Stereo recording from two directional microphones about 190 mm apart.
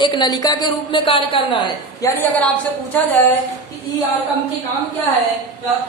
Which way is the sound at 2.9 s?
10° left (ahead or behind).